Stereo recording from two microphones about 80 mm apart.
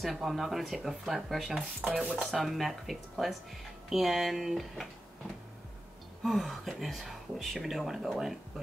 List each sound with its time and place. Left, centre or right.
0.0 s speech: centre
1.9 s stir: centre
2.3 s speech: centre
6.2 s speech: centre